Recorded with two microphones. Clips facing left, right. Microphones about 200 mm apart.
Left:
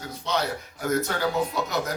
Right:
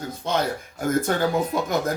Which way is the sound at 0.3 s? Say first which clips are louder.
Right 3 dB; 50° right (ahead or behind).